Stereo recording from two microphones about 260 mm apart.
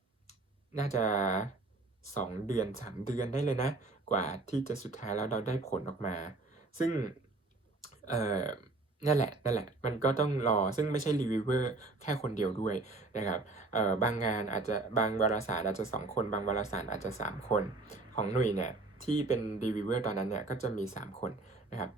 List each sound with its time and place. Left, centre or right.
0.8 s speech: left